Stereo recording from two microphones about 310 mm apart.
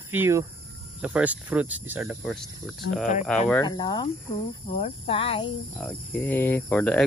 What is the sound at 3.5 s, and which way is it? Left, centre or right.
Speech, centre.